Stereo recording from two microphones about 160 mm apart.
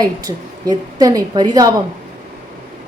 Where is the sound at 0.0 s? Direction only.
25° right (ahead or behind).